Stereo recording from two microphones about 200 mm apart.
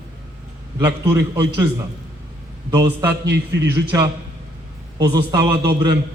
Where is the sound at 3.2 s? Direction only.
55° right (ahead or behind).